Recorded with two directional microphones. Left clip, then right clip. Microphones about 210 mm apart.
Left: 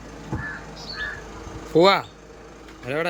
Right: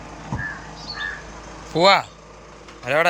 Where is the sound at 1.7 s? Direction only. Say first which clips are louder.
Right 1 dB; 15° left (ahead or behind).